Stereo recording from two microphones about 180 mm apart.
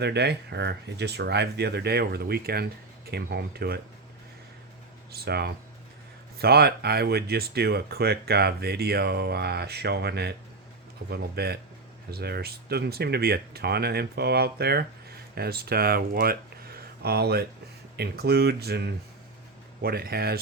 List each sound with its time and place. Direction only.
0.0 s speech: 65° right (ahead or behind)
5.1 s speech: 65° right (ahead or behind)